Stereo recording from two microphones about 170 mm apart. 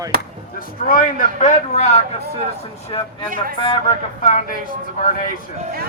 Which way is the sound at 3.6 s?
25° left (ahead or behind).